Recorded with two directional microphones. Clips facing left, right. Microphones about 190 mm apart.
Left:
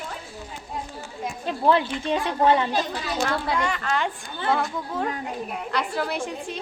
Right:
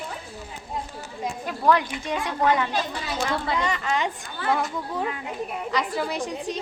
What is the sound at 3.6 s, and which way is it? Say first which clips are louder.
A woman's voice: even; 5° right (ahead or behind).